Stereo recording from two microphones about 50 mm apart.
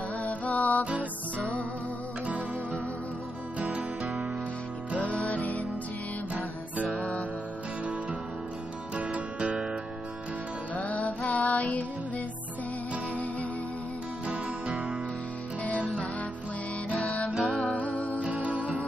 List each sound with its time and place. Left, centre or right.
0.2 s music: left
3.5 s music: right
4.0 s music: centre
8.9 s music: right
10.7 s music: left
14.3 s music: centre
17.3 s music: centre
17.7 s music: left